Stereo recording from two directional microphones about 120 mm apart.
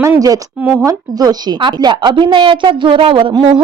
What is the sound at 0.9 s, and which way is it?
Speech, 35° right (ahead or behind).